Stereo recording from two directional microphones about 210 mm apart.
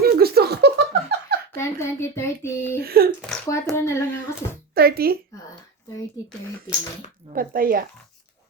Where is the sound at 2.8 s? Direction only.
45° right (ahead or behind).